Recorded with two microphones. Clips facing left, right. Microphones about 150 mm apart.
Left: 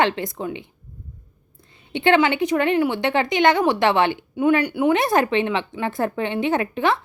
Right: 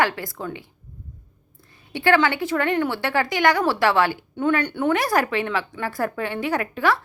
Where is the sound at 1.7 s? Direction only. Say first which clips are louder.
Left 2 dB; 20° left (ahead or behind).